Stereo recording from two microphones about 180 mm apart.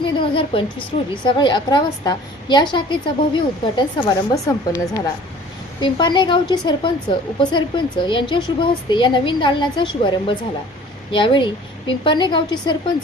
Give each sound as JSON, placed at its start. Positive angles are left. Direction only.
{"t": 0.0, "sound": "a sound", "side_deg": 30}
{"t": 1.1, "sound": "speech", "side_deg": 25}
{"t": 5.8, "sound": "speech", "side_deg": 25}